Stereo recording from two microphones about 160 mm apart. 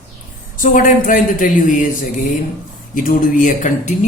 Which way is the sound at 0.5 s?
55° left (ahead or behind).